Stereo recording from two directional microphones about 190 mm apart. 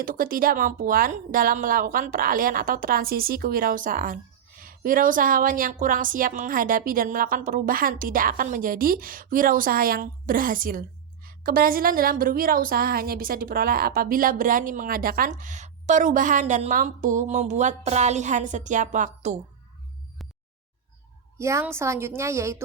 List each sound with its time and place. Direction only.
0.0 s a woman's voice: 50° right (ahead or behind)
21.3 s a woman's voice: 15° right (ahead or behind)